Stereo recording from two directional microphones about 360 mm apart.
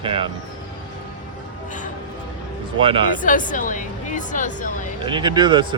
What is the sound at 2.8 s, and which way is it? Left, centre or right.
Speech, centre.